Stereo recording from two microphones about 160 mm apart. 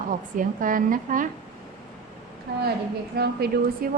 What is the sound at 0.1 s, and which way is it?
A woman's voice, 55° right (ahead or behind).